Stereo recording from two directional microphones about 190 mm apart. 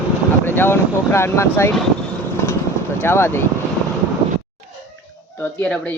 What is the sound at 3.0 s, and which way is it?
Speech, 10° left (ahead or behind).